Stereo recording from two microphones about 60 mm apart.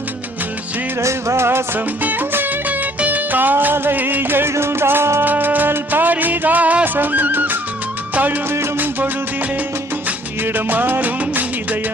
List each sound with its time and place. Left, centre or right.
1.0 s music: right
2.0 s music: right
5.2 s music: right
10.4 s music of bollywood: right